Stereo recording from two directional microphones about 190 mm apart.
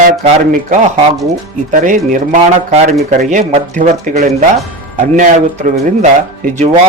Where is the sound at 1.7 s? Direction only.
45° right (ahead or behind).